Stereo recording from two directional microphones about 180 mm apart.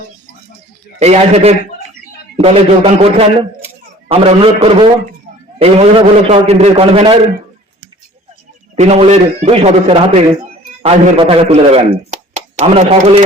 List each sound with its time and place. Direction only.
0.9 s a man's voice: 35° right (ahead or behind)
8.7 s a man's voice: 35° right (ahead or behind)